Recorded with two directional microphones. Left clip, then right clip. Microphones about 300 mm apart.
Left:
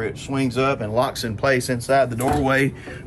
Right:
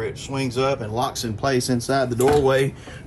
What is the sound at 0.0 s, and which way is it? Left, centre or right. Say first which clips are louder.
Speech: left 2 dB; centre.